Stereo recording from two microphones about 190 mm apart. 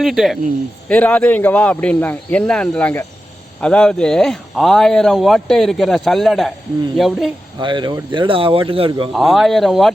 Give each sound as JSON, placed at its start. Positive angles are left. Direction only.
{"t": 0.0, "sound": "speech", "side_deg": 0}
{"t": 7.6, "sound": "a man's voice", "side_deg": -25}
{"t": 9.1, "sound": "speech", "side_deg": 0}